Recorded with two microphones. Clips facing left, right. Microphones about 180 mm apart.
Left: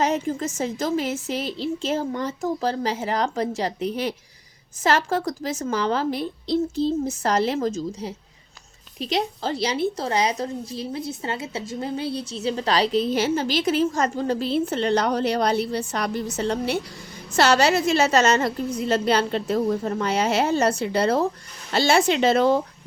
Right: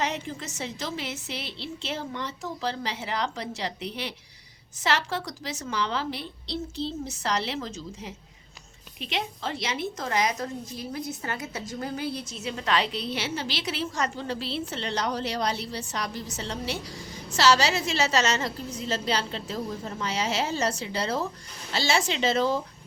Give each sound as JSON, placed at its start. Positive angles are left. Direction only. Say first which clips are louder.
{"t": 0.0, "sound": "a woman's voice", "louder": "left 8 dB", "side_deg": 45}